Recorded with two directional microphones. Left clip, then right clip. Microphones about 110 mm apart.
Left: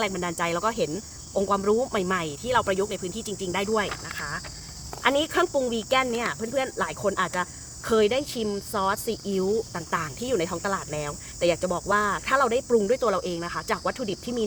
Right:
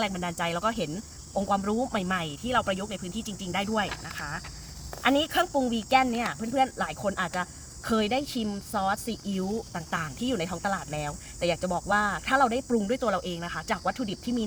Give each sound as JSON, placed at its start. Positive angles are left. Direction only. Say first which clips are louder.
{"t": 0.0, "sound": "speech", "louder": "left 3 dB", "side_deg": 25}